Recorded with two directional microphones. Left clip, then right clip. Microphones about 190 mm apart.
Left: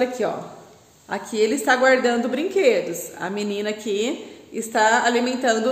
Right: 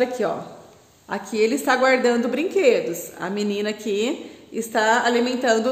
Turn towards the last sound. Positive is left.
turn(degrees=-20)  # may be behind; listen again after turning